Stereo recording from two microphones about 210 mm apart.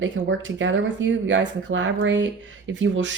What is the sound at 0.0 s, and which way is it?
Speech, 65° right (ahead or behind).